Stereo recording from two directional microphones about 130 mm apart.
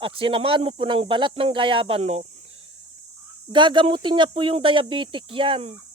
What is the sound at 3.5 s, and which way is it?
Speech, 40° right (ahead or behind).